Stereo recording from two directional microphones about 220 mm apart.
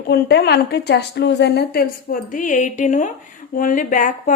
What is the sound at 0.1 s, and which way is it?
A woman's voice, 50° left (ahead or behind).